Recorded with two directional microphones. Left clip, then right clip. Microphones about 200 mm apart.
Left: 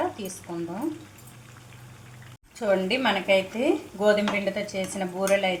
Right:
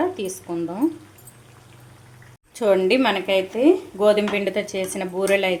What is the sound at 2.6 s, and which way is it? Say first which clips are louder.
A woman's voice: right 6 dB; 50° right (ahead or behind).